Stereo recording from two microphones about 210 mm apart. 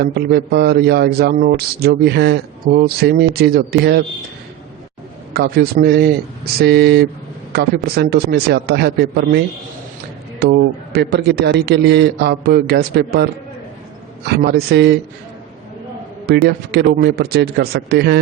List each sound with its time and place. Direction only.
0.0 s a man's voice: 50° right (ahead or behind)
5.3 s a man's voice: 50° right (ahead or behind)
10.4 s a man's voice: 50° right (ahead or behind)
14.3 s a man's voice: 50° right (ahead or behind)
16.2 s a man's voice: 50° right (ahead or behind)